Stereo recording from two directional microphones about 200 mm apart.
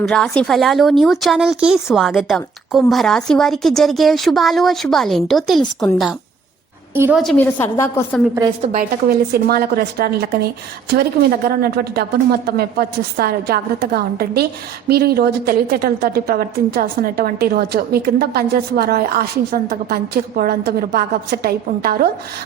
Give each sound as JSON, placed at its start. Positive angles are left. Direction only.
{"t": 0.0, "sound": "a woman's voice", "side_deg": 5}
{"t": 6.9, "sound": "a woman's voice", "side_deg": -10}
{"t": 7.2, "sound": "a woman's voice", "side_deg": 5}
{"t": 8.4, "sound": "a woman's voice", "side_deg": -25}
{"t": 8.7, "sound": "a woman's voice", "side_deg": -50}
{"t": 11.4, "sound": "a woman's voice", "side_deg": -50}